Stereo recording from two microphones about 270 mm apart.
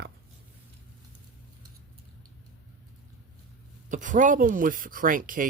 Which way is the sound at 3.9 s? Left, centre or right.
Right.